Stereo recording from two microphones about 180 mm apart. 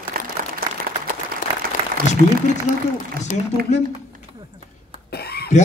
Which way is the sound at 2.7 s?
45° left (ahead or behind).